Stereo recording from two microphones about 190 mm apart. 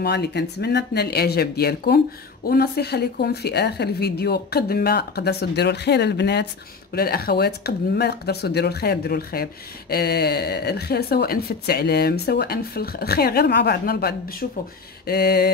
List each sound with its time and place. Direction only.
0.0 s speech: 60° left (ahead or behind)